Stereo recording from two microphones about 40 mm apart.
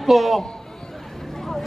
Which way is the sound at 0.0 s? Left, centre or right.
Centre.